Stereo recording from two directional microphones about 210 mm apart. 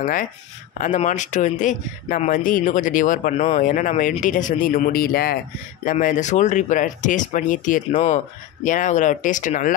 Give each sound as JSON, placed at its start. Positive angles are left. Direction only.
{"t": 0.0, "sound": "speech", "side_deg": 40}